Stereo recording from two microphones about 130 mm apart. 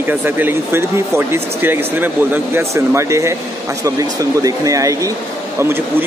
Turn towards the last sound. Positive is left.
turn(degrees=-25)  # may be behind; listen again after turning